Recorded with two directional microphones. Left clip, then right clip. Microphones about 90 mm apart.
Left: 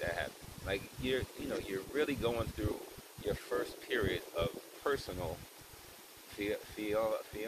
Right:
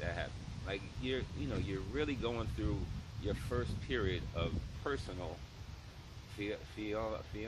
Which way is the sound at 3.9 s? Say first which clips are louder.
Left 3 dB; 35° right (ahead or behind).